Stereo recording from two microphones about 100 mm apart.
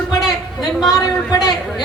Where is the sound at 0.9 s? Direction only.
40° left (ahead or behind).